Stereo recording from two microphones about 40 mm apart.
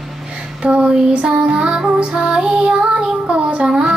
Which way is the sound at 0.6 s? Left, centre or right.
Right.